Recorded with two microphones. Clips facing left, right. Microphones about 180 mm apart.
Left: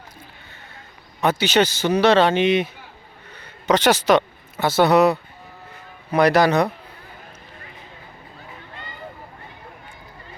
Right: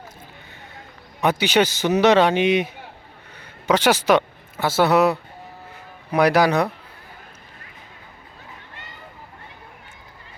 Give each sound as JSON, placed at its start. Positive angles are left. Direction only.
{"t": 1.2, "sound": "speech", "side_deg": -15}
{"t": 3.3, "sound": "a sound", "side_deg": -10}
{"t": 4.6, "sound": "speech", "side_deg": -5}